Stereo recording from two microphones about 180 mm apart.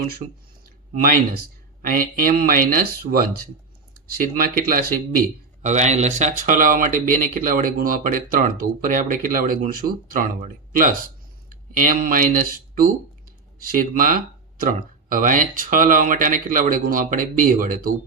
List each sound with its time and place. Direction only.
0.6 s a sound: 55° right (ahead or behind)
1.9 s speech: 50° right (ahead or behind)
5.6 s speech: 40° right (ahead or behind)